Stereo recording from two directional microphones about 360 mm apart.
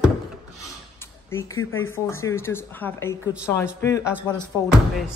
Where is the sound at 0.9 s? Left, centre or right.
Centre.